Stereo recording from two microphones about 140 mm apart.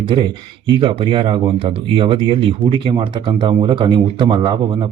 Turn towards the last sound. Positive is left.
turn(degrees=-35)  # may be behind; listen again after turning